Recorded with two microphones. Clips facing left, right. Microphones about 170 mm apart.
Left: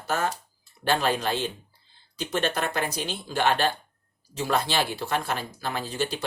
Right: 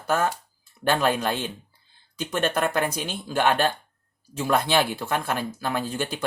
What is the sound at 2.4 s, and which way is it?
Speech, 50° right (ahead or behind).